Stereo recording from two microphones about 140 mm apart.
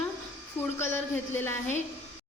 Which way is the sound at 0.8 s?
15° left (ahead or behind).